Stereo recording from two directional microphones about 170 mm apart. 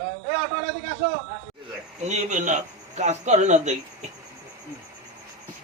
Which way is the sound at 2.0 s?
45° right (ahead or behind).